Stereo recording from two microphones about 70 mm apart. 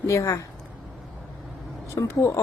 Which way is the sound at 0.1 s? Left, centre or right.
Left.